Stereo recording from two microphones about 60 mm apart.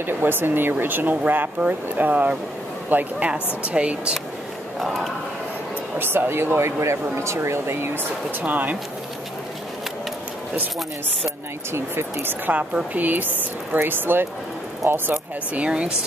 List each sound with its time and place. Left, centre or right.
0.0 s a woman's voice: right
3.3 s a woman's voice: centre
4.7 s speech: centre
5.9 s speech: right
11.7 s speech: right
15.6 s speech: centre